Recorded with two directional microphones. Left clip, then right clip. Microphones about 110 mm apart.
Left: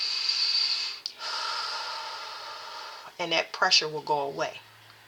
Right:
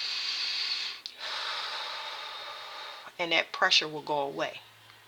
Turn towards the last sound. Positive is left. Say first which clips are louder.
# left 3 dB
turn(degrees=-35)  # may be behind; listen again after turning